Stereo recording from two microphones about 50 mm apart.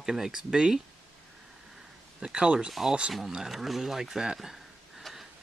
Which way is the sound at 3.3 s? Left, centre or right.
Centre.